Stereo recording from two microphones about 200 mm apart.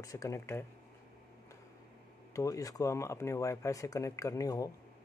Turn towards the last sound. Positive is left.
turn(degrees=15)  # may be behind; listen again after turning